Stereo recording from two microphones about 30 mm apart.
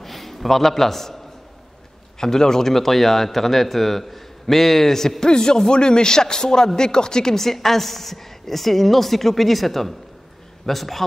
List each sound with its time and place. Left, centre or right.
0.0 s a sound: centre
2.1 s speech: centre
2.7 s a woman's voice: centre
5.2 s speech: left
7.3 s a woman's voice: centre